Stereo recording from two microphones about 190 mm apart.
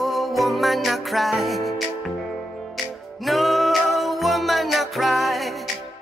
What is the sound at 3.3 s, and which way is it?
Music, centre (ahead or behind).